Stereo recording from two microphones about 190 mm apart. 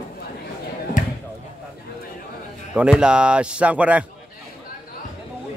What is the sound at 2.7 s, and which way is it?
Speech, 5° right (ahead or behind).